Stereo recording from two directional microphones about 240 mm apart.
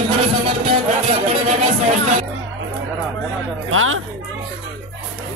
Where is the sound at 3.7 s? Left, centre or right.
Right.